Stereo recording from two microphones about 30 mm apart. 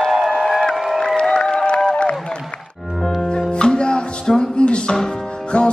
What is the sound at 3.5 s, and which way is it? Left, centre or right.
Music, left.